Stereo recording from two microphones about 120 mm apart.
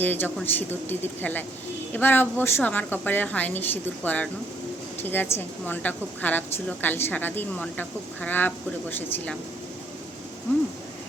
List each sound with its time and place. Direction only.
0.0 s a woman's voice: 15° left (ahead or behind)